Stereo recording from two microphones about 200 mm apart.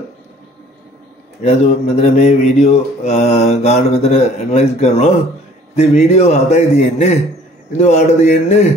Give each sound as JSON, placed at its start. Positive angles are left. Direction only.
{"t": 1.4, "sound": "speech", "side_deg": 35}